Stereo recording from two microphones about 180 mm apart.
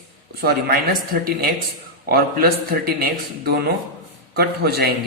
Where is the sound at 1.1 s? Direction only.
55° right (ahead or behind).